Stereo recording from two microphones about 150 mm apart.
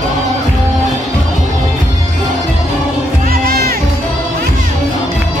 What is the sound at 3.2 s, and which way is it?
Music, 80° right.